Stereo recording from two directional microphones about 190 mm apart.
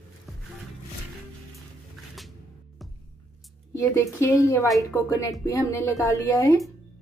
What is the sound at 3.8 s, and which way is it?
A woman's voice, 15° left (ahead or behind).